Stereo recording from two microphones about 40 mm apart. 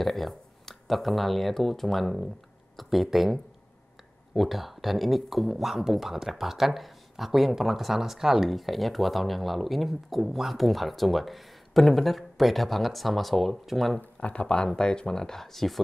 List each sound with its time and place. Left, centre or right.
0.0 s speech: centre
14.2 s speech: left; by 15.8 s centre